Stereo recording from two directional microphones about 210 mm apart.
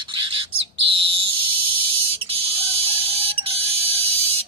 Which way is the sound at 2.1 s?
25° right (ahead or behind).